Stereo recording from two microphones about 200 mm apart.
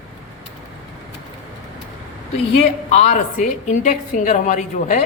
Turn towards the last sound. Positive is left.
turn(degrees=40)  # may be behind; listen again after turning